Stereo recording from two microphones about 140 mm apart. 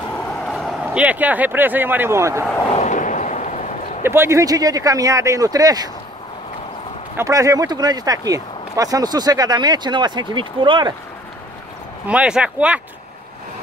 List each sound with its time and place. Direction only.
0.5 s speech: centre (ahead or behind); by 2.4 s 20° right (ahead or behind)
2.7 s a sound: 60° left (ahead or behind)
4.0 s speech: 15° right (ahead or behind)
7.2 s speech: 25° right (ahead or behind)
12.1 s speech: 5° right (ahead or behind)